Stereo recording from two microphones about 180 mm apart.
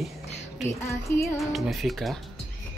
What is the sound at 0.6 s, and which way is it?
Speech, 15° left (ahead or behind).